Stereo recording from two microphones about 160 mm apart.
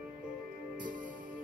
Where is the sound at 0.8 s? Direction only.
55° right (ahead or behind).